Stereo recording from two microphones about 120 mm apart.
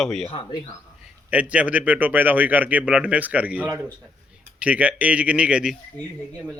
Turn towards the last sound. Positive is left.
turn(degrees=-5)  # may be behind; listen again after turning